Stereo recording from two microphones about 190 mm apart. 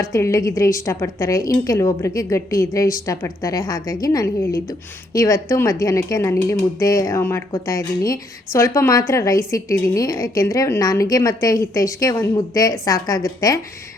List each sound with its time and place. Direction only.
0.0 s speech: 15° left (ahead or behind)